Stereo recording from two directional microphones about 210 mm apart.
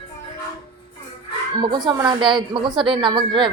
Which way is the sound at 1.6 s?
20° right (ahead or behind).